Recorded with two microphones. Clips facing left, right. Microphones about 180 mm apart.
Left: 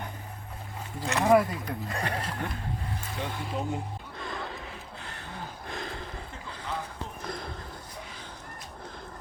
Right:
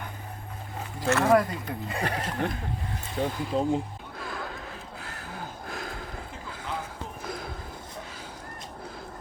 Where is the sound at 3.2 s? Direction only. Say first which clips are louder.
Right 8 dB; 50° right (ahead or behind).